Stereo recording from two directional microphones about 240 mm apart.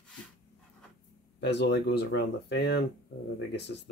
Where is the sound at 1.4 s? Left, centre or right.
Left.